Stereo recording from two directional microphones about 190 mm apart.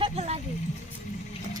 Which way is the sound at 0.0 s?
35° right (ahead or behind).